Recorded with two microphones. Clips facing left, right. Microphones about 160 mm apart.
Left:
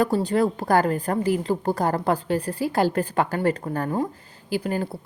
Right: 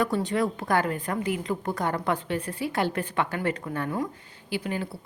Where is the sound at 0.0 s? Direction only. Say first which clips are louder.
Left 4 dB; 35° left (ahead or behind).